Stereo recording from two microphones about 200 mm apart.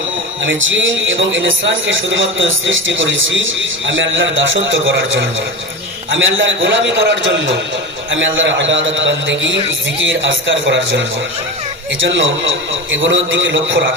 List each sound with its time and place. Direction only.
0.4 s a man's voice: 70° right (ahead or behind)